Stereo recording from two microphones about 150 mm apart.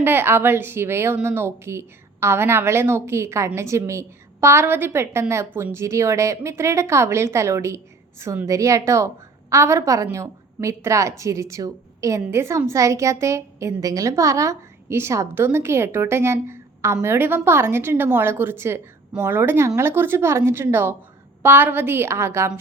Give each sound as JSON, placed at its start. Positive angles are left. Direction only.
{"t": 0.0, "sound": "a woman's voice", "side_deg": -15}